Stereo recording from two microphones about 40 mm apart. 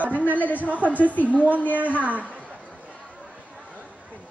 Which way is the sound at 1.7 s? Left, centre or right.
Right.